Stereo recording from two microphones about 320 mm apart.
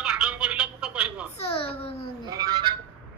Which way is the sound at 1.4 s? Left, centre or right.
Centre.